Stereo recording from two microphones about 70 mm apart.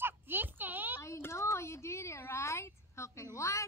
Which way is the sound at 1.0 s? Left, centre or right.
Left.